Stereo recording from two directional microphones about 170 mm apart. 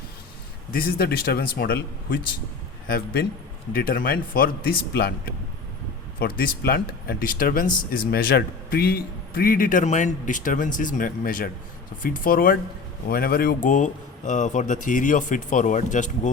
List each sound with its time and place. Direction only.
0.7 s a man's voice: 60° left (ahead or behind)
3.7 s speech: 55° left (ahead or behind)